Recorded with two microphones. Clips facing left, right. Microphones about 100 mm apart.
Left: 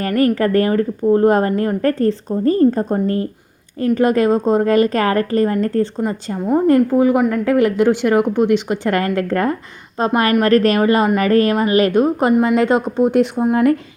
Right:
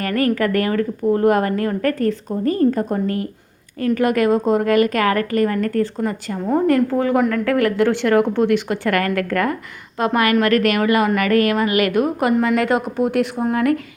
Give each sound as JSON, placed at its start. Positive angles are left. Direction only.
{"t": 0.0, "sound": "a woman's voice", "side_deg": 30}
{"t": 6.9, "sound": "a woman's voice", "side_deg": 15}